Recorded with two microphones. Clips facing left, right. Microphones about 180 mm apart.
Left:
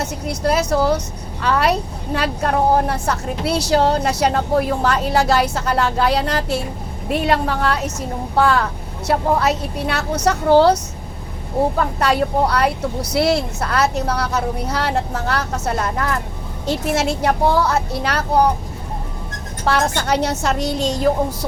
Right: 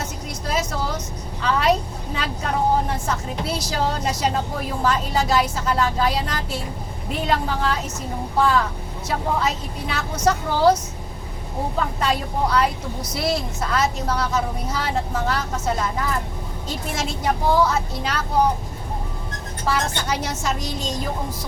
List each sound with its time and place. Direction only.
0.0 s a woman's voice: 70° left (ahead or behind)
11.9 s a woman's voice: 70° left (ahead or behind)
19.6 s a woman's voice: 70° left (ahead or behind)